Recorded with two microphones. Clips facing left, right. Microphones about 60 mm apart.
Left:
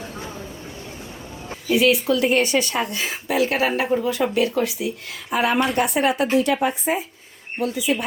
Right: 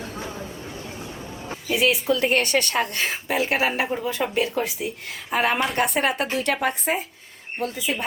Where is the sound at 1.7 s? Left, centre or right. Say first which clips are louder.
Left 3 dB; right.